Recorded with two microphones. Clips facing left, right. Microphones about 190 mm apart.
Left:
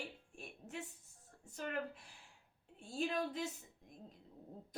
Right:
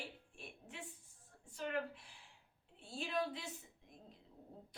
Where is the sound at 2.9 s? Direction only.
45° left (ahead or behind).